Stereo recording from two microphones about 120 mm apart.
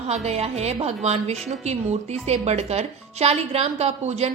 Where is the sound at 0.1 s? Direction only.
60° right (ahead or behind).